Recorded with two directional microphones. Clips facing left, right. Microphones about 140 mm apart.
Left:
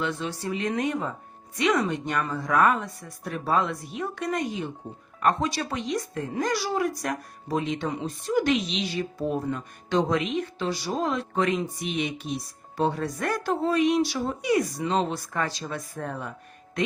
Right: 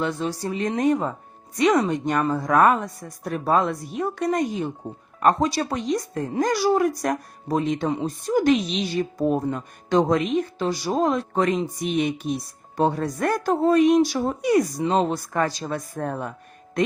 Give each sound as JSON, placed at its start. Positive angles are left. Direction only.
{"t": 0.0, "sound": "a woman's voice", "side_deg": -40}